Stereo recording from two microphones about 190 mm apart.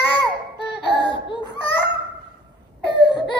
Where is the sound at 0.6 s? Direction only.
25° left (ahead or behind).